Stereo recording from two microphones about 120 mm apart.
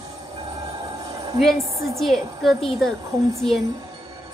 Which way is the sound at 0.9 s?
30° right (ahead or behind).